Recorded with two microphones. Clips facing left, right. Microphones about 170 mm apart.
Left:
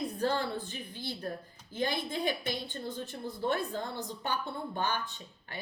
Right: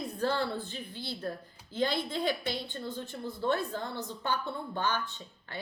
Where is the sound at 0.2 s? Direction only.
15° left (ahead or behind).